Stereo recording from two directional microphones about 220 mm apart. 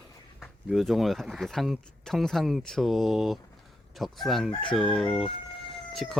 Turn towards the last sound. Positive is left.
turn(degrees=0)  # may be behind; listen again after turning